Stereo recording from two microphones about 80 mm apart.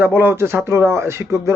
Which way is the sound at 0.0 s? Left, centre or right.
Right.